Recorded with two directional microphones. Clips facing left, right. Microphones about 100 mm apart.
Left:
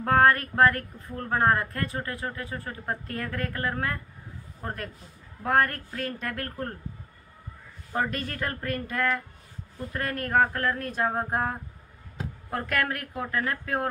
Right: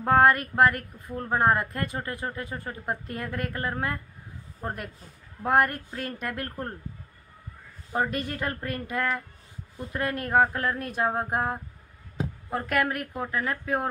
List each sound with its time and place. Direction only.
0.0 s a woman's voice: 10° right (ahead or behind)
7.9 s a woman's voice: 20° right (ahead or behind)